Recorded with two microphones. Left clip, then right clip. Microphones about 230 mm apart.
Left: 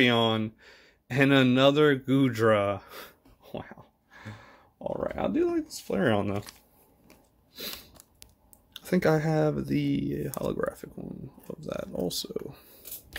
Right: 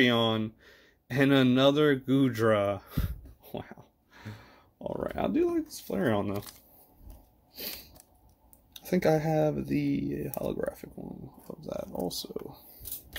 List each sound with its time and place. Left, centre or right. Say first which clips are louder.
0.0 s speech: left 2 dB; centre
8.8 s speech: left 1 dB; centre